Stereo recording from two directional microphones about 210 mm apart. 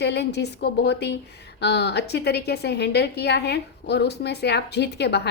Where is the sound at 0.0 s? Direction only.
55° left (ahead or behind).